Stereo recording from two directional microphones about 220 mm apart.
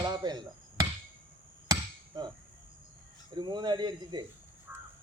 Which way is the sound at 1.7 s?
15° right (ahead or behind).